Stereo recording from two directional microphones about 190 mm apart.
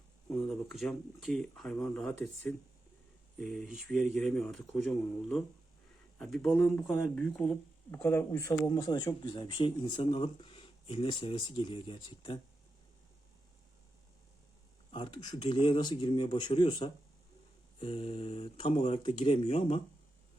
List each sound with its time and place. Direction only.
0.3 s a sound: 10° left (ahead or behind)
0.5 s speech: centre (ahead or behind)
3.6 s speech: centre (ahead or behind); by 12.4 s 25° left (ahead or behind)
14.9 s speech: 25° left (ahead or behind)